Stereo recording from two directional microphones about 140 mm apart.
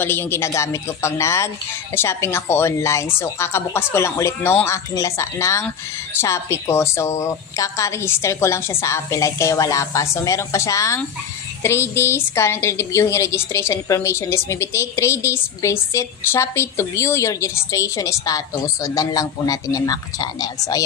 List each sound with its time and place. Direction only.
0.0 s a woman's voice: 15° left (ahead or behind)